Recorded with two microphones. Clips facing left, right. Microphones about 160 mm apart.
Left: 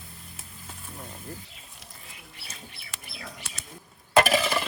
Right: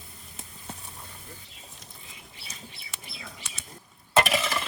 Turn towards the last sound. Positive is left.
turn(degrees=0)  # may be behind; listen again after turning